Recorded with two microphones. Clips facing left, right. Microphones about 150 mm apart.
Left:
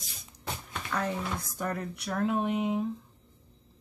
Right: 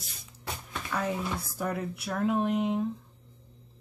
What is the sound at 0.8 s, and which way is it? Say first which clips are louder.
Speech: right 1 dB; 5° right (ahead or behind).